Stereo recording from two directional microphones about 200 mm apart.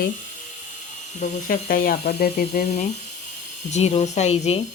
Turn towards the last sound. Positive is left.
turn(degrees=30)  # may be behind; listen again after turning